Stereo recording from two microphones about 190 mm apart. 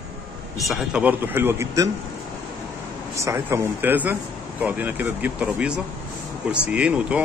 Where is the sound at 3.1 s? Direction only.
15° right (ahead or behind).